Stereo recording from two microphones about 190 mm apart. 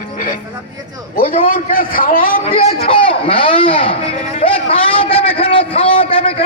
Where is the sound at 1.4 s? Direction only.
45° left (ahead or behind).